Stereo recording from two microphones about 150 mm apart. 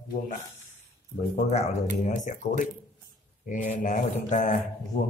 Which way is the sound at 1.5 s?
45° left (ahead or behind).